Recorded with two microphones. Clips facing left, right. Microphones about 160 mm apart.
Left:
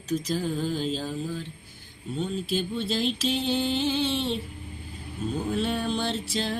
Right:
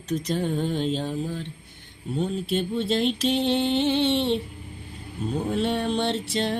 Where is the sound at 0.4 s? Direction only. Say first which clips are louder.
Right 2 dB; 25° right (ahead or behind).